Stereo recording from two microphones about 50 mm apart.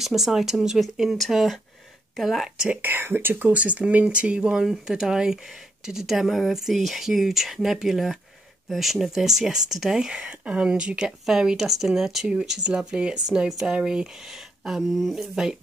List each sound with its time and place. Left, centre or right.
0.0 s speech: centre
2.8 s speech: right
3.5 s speech: right
14.6 s speech: centre
15.1 s speech: centre